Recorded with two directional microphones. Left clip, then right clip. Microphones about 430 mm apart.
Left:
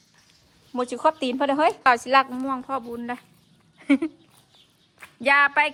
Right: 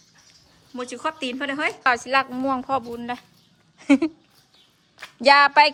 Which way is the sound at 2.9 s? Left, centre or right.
Centre.